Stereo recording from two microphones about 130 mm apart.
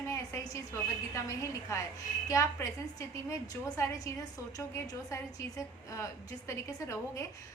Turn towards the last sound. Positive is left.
turn(degrees=25)  # may be behind; listen again after turning